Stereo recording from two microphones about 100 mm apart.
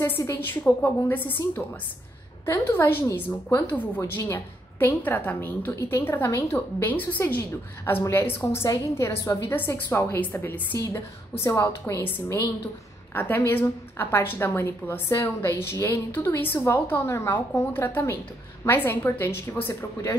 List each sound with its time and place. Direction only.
0.2 s a woman's voice: 25° left (ahead or behind)
9.5 s a woman's voice: 20° left (ahead or behind)